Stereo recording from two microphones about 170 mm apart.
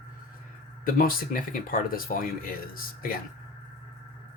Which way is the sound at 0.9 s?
55° left (ahead or behind).